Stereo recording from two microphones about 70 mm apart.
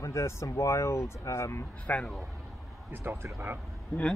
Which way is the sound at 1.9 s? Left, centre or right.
Left.